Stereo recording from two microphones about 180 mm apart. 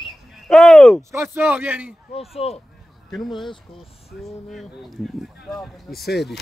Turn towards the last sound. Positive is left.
turn(degrees=0)  # may be behind; listen again after turning